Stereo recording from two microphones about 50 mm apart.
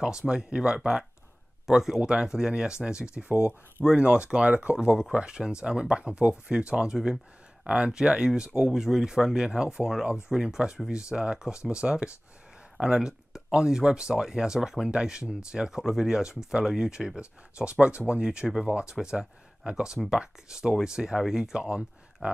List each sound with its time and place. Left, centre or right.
0.3 s speech: centre
1.7 s speech: centre
2.0 s speech: right
4.7 s speech: centre
7.6 s speech: right